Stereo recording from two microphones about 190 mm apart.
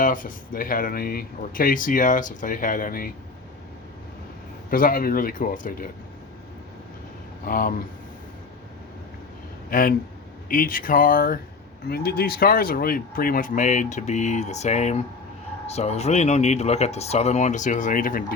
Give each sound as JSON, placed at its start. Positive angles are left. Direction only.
{"t": 0.0, "sound": "speech", "side_deg": 45}
{"t": 4.7, "sound": "speech", "side_deg": 50}
{"t": 7.4, "sound": "speech", "side_deg": 45}
{"t": 9.6, "sound": "speech", "side_deg": 50}